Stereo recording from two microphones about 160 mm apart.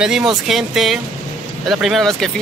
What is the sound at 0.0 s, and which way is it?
Speech, 5° right (ahead or behind).